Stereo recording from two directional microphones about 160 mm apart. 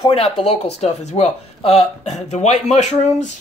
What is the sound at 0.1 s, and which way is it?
Speech, 40° left (ahead or behind).